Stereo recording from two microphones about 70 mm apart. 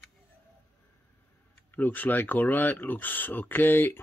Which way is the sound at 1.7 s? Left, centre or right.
Left.